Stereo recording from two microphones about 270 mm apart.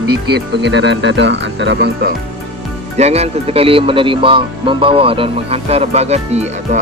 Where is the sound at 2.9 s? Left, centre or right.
Right.